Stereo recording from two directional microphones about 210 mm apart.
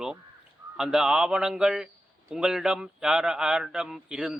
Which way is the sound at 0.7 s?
5° right (ahead or behind).